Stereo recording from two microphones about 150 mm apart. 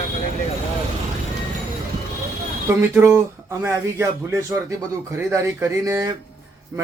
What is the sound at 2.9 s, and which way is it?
Speech, 15° right (ahead or behind).